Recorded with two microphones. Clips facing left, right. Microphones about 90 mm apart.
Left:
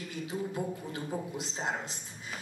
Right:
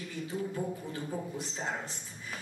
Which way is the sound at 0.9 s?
15° left (ahead or behind).